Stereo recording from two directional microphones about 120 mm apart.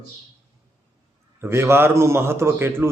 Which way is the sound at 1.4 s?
20° right (ahead or behind).